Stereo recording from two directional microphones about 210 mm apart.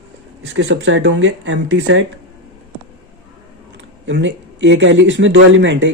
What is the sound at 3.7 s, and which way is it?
Speech, 60° right (ahead or behind).